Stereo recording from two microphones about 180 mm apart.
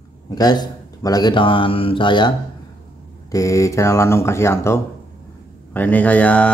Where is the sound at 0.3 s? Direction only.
20° left (ahead or behind).